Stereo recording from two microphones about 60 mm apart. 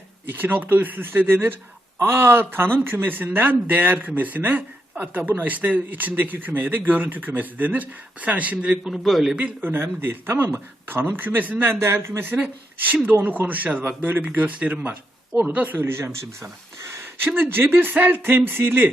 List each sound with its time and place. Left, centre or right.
0.3 s speech: right; by 8.9 s centre
8.9 s a man's voice: centre
9.6 s speech: right
11.7 s a man's voice: right
17.2 s speech: right